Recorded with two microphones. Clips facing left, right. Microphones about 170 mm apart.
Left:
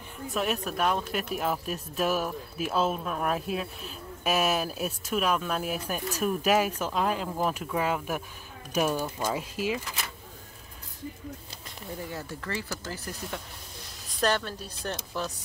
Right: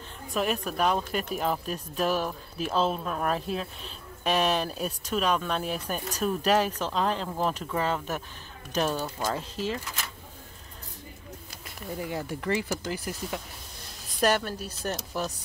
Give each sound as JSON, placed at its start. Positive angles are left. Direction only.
{"t": 0.3, "sound": "speech", "side_deg": 0}
{"t": 12.1, "sound": "speech", "side_deg": -15}